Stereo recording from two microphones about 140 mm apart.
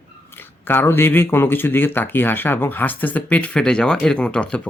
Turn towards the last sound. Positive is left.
turn(degrees=5)  # may be behind; listen again after turning